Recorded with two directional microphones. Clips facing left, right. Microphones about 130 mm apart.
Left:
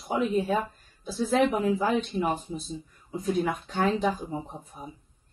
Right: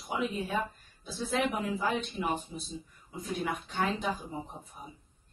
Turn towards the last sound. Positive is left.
turn(degrees=40)  # may be behind; listen again after turning